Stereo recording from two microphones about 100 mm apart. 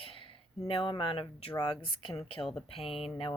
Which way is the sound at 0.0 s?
65° left (ahead or behind).